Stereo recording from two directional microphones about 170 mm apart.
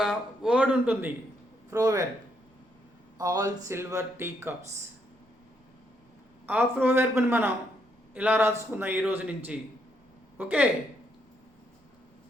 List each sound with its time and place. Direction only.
0.0 s speech: 5° right (ahead or behind)
1.7 s speech: 20° right (ahead or behind)
3.2 s speech: 20° right (ahead or behind)
6.4 s speech: 10° right (ahead or behind)